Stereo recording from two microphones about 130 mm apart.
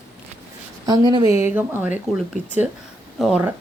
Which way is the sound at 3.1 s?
Centre (ahead or behind).